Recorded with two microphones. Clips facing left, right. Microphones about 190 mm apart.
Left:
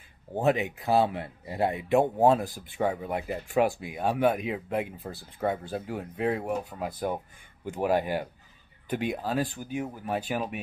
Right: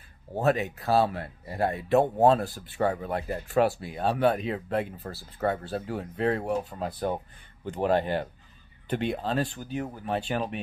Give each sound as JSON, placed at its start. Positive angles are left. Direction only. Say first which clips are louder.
{"t": 0.4, "sound": "speech", "louder": "even", "side_deg": 15}